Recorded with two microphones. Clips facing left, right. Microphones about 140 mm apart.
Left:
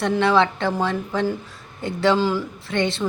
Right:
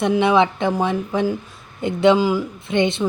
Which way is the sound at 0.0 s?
15° right (ahead or behind).